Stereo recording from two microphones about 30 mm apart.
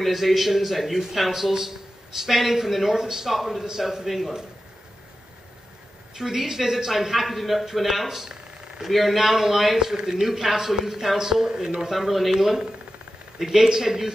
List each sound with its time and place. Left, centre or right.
0.0 s a man's voice: centre
6.1 s a man's voice: centre
11.9 s a man's voice: centre